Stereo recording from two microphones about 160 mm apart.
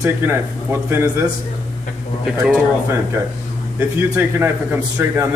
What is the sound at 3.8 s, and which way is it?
Speech, 15° right (ahead or behind).